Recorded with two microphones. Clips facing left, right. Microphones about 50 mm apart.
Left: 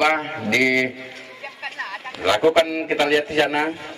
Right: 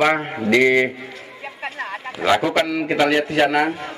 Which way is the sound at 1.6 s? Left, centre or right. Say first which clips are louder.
Right 2 dB; right.